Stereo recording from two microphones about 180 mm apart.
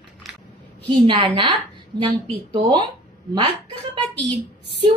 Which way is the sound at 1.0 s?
30° right (ahead or behind).